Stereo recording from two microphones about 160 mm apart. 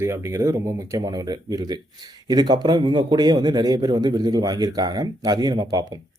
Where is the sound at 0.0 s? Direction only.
20° right (ahead or behind).